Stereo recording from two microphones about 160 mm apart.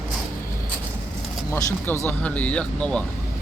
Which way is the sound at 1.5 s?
15° left (ahead or behind).